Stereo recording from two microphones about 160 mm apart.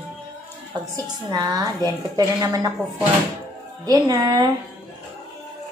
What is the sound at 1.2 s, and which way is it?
A woman's voice, 25° right (ahead or behind).